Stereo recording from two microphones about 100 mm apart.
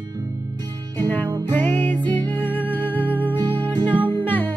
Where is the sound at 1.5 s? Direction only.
20° left (ahead or behind).